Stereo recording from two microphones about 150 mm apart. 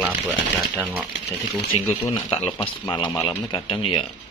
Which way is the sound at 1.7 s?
40° left (ahead or behind).